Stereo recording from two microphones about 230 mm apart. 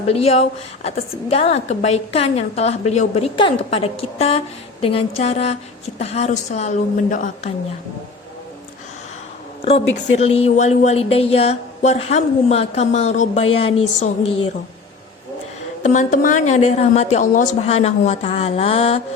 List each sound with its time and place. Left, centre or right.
0.1 s a woman's voice: left
9.6 s a woman's voice: left
15.8 s a woman's voice: left